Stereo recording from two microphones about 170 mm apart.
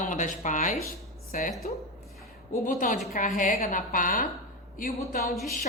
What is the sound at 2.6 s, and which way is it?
A woman's voice, 50° left (ahead or behind).